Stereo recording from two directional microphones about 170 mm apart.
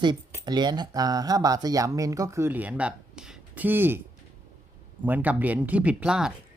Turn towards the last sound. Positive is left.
turn(degrees=-5)  # may be behind; listen again after turning